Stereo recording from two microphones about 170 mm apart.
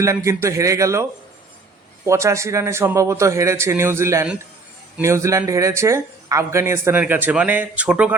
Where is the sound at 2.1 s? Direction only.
15° right (ahead or behind).